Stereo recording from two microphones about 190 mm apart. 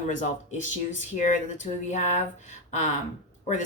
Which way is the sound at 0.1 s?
40° left (ahead or behind).